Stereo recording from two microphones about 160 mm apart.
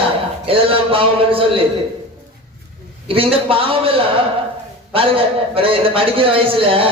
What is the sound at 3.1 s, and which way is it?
A man's voice, 35° right (ahead or behind).